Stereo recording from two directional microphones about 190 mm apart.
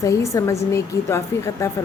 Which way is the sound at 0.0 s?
15° left (ahead or behind).